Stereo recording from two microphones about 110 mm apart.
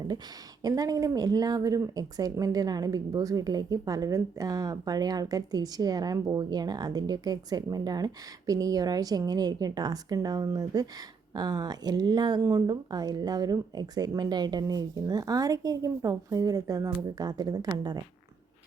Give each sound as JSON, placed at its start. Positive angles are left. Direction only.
{"t": 0.6, "sound": "speech", "side_deg": -35}